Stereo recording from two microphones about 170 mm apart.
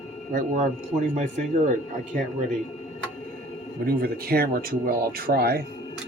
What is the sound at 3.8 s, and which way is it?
Speech, 60° right (ahead or behind).